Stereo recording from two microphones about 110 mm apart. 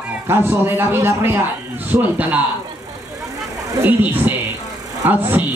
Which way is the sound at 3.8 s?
15° right (ahead or behind).